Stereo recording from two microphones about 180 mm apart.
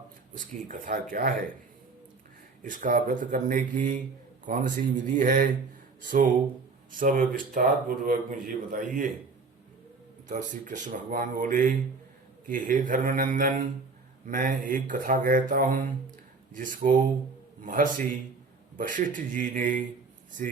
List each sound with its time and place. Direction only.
0.3 s speech: 50° right (ahead or behind)
2.6 s speech: 45° right (ahead or behind)
10.2 s speech: 45° right (ahead or behind)